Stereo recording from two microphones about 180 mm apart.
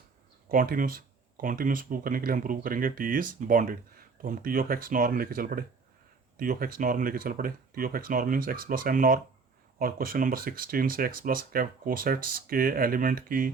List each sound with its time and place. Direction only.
0.4 s speech: 50° right (ahead or behind)